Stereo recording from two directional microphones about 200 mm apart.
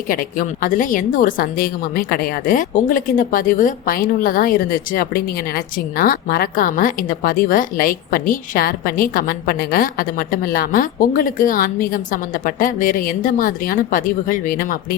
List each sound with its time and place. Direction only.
0.1 s a woman's voice: 45° left (ahead or behind)